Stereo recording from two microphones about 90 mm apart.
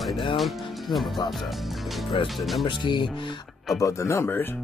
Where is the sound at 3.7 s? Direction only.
35° left (ahead or behind).